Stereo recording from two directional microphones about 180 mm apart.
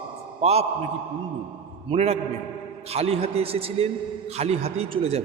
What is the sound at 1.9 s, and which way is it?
A man's voice, 35° right (ahead or behind).